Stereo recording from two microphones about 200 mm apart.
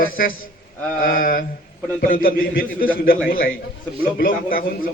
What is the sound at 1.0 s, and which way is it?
A man's voice, 45° left (ahead or behind).